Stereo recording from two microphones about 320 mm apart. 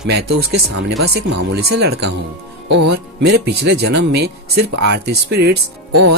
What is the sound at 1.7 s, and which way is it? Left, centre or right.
Speech, right.